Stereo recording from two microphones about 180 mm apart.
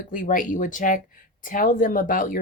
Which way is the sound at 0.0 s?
45° left (ahead or behind).